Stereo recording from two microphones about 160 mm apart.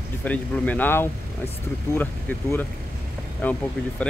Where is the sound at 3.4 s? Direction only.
10° left (ahead or behind).